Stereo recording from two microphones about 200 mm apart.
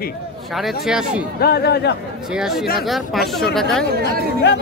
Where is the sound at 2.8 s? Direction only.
Centre (ahead or behind).